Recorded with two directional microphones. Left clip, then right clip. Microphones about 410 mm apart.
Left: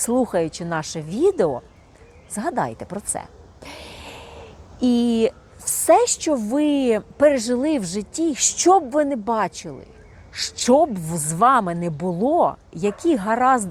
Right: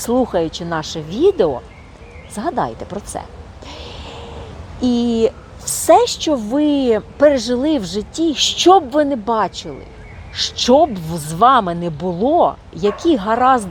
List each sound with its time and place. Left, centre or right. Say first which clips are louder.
0.0 s a woman's voice: right 4 dB; left
3.7 s a sound: right 4 dB; left
4.8 s a woman's voice: right 3 dB; left